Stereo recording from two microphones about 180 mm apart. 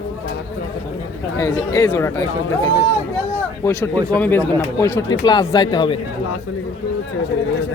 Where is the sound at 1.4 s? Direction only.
20° left (ahead or behind).